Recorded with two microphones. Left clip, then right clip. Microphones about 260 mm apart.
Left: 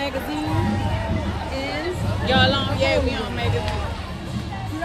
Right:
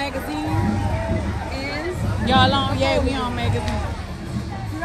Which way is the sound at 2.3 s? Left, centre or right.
Centre.